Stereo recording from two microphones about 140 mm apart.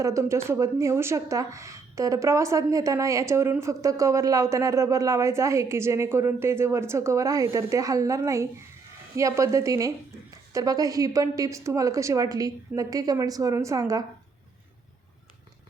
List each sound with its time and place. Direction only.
0.0 s a woman's voice: 20° right (ahead or behind)